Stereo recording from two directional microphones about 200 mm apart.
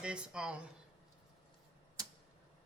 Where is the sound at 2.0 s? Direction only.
15° right (ahead or behind).